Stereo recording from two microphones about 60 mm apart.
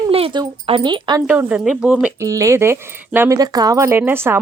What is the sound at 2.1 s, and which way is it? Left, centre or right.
Speech, right.